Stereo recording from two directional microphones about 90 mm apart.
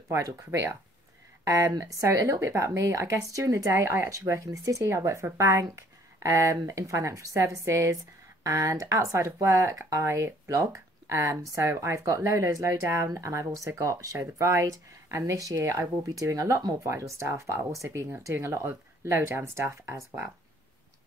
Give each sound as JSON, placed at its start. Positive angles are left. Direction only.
{"t": 0.1, "sound": "speech", "side_deg": -35}